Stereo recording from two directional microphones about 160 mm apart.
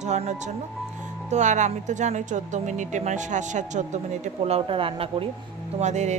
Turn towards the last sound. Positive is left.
turn(degrees=-45)  # may be behind; listen again after turning